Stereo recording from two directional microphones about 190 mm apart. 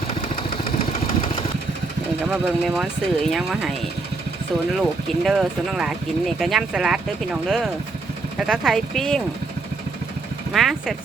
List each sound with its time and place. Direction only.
0.1 s vehicle: 30° left (ahead or behind)
2.4 s speech: centre (ahead or behind)
4.8 s speech: centre (ahead or behind)
10.5 s speech: centre (ahead or behind)